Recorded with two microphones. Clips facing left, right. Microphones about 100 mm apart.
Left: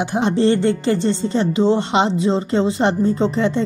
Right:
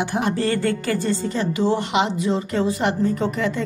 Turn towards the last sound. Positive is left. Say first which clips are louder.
# left 4 dB
turn(degrees=25)  # may be behind; listen again after turning